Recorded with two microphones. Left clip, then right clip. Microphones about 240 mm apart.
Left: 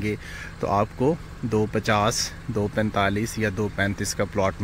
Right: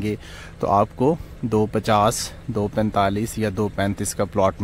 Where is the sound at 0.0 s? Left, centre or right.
Centre.